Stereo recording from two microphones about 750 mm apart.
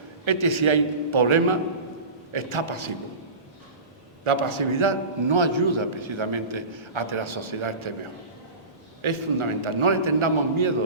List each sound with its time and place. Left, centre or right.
0.3 s a man's voice: right
4.2 s a man's voice: right
9.0 s a man's voice: right